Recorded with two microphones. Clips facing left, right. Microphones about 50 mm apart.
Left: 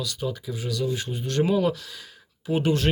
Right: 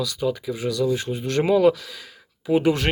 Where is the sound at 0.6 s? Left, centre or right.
Right.